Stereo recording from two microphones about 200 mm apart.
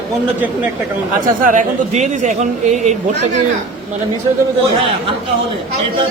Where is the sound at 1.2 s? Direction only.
40° right (ahead or behind).